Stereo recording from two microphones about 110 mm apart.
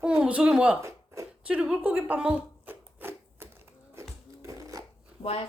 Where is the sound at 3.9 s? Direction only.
30° right (ahead or behind).